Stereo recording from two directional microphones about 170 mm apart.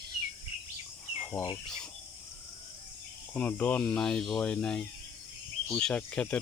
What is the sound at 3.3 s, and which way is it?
Speech, 10° left (ahead or behind).